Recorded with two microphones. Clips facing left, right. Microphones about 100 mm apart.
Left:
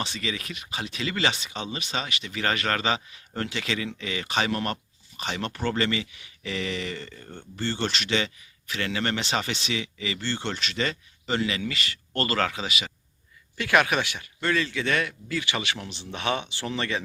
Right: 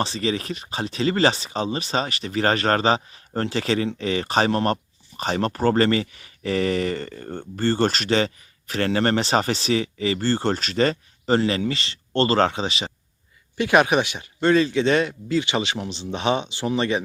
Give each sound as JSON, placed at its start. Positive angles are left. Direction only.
{"t": 0.0, "sound": "speech", "side_deg": -35}